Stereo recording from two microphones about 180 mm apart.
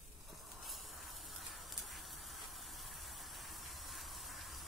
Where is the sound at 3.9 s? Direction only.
Centre (ahead or behind).